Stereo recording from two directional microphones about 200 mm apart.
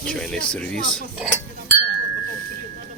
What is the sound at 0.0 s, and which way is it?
Speech, 5° left (ahead or behind).